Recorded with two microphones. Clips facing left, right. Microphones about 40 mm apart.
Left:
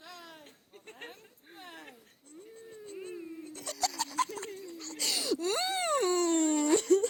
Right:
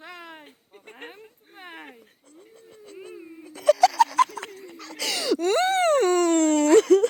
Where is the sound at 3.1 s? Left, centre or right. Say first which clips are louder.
Right 1 dB; centre.